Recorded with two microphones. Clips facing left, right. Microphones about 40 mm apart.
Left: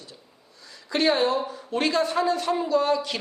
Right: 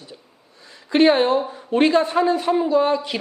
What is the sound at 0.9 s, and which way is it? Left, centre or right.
A man's voice, right.